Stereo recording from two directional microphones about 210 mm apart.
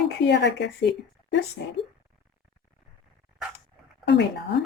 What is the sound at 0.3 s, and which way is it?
Speech, 55° left (ahead or behind).